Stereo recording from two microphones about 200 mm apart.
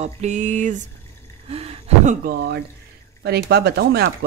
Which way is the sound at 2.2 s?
55° right (ahead or behind).